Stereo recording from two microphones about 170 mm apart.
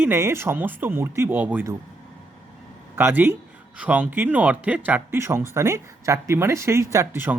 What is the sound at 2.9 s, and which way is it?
Speech, 10° right (ahead or behind).